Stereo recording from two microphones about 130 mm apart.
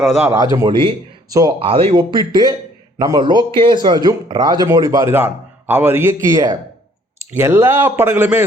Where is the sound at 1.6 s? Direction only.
45° right (ahead or behind).